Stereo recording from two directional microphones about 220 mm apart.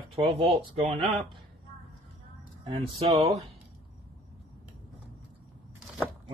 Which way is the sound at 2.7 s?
25° right (ahead or behind).